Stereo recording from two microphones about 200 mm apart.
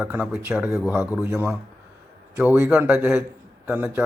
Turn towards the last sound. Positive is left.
turn(degrees=-5)  # may be behind; listen again after turning